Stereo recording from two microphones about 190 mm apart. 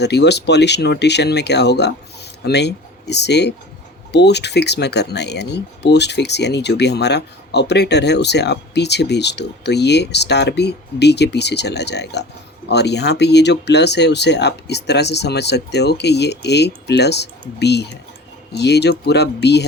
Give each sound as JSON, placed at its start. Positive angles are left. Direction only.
{"t": 0.0, "sound": "speech", "side_deg": 65}